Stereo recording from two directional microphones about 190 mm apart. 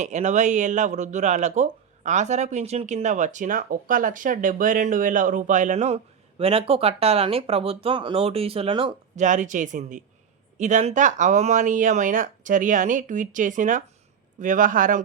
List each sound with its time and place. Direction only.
0.0 s speech: 40° right (ahead or behind)
9.2 s speech: 40° right (ahead or behind)